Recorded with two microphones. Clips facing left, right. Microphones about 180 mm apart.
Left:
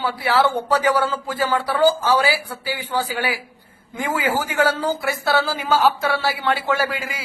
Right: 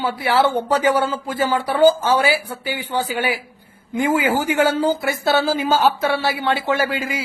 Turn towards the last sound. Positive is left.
turn(degrees=-25)  # may be behind; listen again after turning